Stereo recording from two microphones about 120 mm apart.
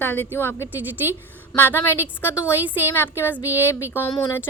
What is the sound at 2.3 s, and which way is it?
A woman's voice, 15° right (ahead or behind).